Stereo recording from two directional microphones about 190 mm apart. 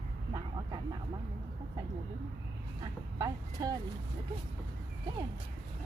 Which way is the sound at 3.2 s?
20° right (ahead or behind).